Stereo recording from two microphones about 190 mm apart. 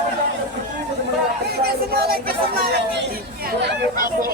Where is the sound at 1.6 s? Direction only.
55° right (ahead or behind).